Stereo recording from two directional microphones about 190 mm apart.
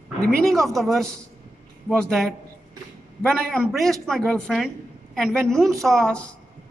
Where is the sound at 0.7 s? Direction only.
Centre (ahead or behind).